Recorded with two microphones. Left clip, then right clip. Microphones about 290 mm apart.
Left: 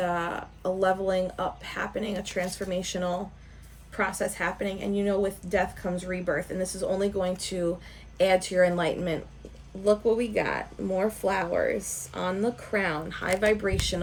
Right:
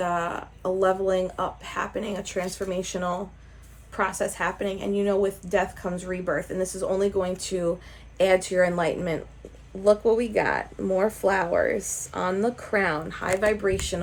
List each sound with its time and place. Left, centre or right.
0.0 s speech: centre
3.9 s speech: centre
6.6 s speech: right
6.9 s speech: centre